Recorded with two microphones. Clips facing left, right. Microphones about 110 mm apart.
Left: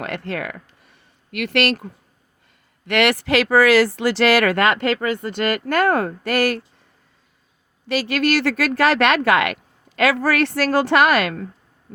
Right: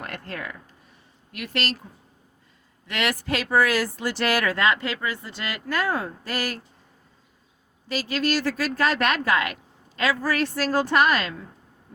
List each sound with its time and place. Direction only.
0.0 s speech: 90° left; by 6.6 s 70° left (ahead or behind)
7.9 s speech: 70° left (ahead or behind)